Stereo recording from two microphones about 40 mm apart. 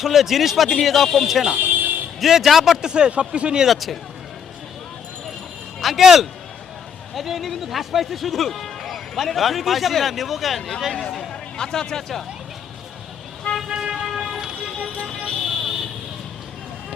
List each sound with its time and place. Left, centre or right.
0.0 s speech: centre
1.5 s vehicle: right
2.2 s speech: centre
2.8 s speech: right
3.7 s speech: centre
5.8 s speech: centre
11.3 s speech: centre
13.7 s vehicle: centre
15.0 s vehicle: centre